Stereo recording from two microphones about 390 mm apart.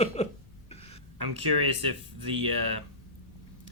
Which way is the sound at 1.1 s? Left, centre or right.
Right.